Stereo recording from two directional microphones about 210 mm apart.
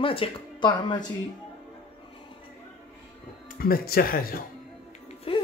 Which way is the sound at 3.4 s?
40° left (ahead or behind).